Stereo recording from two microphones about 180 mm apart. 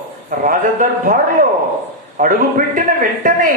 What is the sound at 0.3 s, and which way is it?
Speech, 50° right (ahead or behind).